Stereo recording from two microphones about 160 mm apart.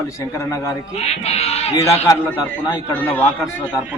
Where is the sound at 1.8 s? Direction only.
20° left (ahead or behind).